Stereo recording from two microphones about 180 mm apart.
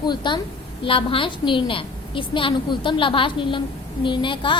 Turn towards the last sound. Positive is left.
turn(degrees=25)  # may be behind; listen again after turning